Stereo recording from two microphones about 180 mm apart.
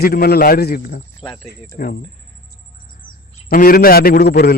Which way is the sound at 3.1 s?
55° left (ahead or behind).